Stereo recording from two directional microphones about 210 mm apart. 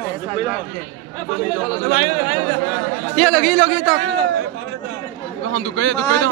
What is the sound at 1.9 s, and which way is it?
Speech, 35° right (ahead or behind).